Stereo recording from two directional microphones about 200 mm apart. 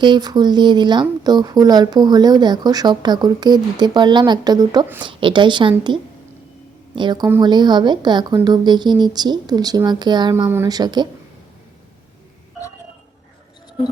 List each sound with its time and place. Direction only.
0.0 s speech: 20° right (ahead or behind)
6.9 s speech: 20° right (ahead or behind)